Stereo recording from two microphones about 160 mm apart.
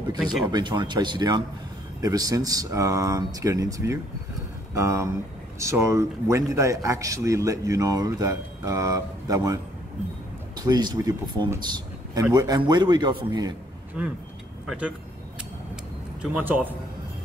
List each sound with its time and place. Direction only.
0.5 s a man's voice: 30° right (ahead or behind)
14.0 s speech: 10° right (ahead or behind)
15.7 s a sound: 5° right (ahead or behind)